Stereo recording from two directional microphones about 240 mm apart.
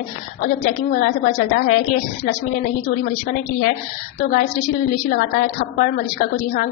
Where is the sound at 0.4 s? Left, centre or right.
Left.